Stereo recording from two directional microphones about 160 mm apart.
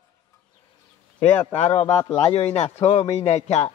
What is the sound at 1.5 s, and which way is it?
Speech, 40° left (ahead or behind).